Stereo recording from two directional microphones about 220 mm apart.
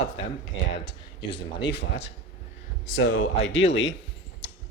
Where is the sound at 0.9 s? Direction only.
20° left (ahead or behind).